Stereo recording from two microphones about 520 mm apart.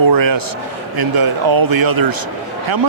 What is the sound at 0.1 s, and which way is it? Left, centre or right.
A man's voice, right.